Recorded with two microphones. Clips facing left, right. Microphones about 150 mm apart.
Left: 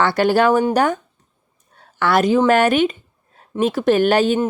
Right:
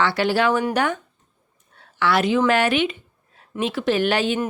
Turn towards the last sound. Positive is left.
turn(degrees=45)  # may be behind; listen again after turning